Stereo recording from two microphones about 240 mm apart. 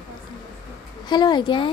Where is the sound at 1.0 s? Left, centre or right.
Centre.